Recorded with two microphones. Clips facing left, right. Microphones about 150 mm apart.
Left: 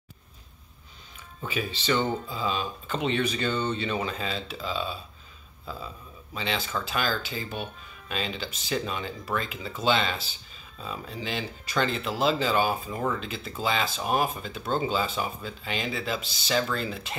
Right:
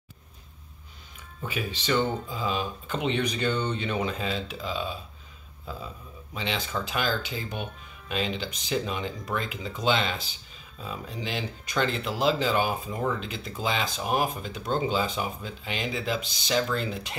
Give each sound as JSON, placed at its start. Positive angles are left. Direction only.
{"t": 1.4, "sound": "speech", "side_deg": -10}
{"t": 6.3, "sound": "speech", "side_deg": -15}